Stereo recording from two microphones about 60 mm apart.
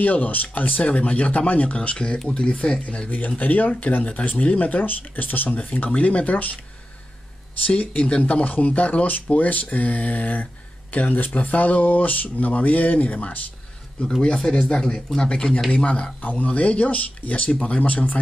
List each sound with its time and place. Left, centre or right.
0.0 s speech: left
5.9 s speech: left
7.6 s speech: left
14.2 s speech: centre
15.7 s speech: centre